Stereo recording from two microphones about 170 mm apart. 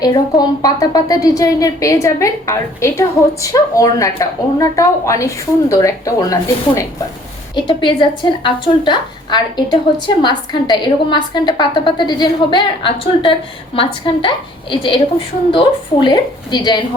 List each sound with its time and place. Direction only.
0.0 s a woman's voice: 25° left (ahead or behind)